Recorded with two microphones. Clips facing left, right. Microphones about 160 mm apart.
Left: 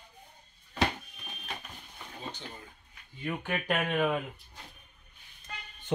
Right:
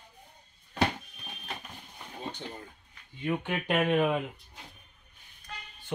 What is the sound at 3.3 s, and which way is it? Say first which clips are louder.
Speech: right 2 dB; 20° right (ahead or behind).